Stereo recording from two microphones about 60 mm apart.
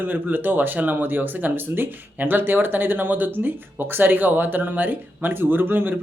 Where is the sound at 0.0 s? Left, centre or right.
Right.